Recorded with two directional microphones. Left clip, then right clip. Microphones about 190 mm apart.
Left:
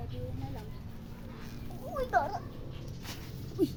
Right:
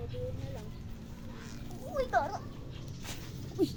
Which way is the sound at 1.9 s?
25° right (ahead or behind).